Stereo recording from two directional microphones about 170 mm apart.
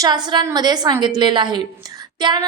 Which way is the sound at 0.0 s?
25° right (ahead or behind).